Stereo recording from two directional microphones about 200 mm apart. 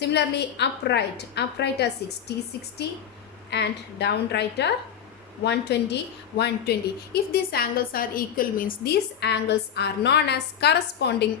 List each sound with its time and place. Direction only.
0.0 s a woman's voice: 55° left (ahead or behind)
3.5 s a woman's voice: 55° left (ahead or behind)